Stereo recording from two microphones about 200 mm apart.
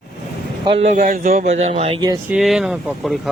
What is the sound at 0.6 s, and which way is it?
Speech, 30° right (ahead or behind).